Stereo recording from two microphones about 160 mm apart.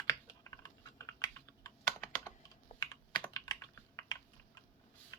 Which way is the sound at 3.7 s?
20° left (ahead or behind).